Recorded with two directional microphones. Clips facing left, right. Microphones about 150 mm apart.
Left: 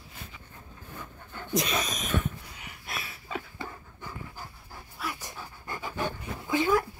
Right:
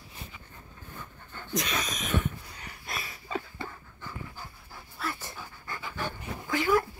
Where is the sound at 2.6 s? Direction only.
5° left (ahead or behind).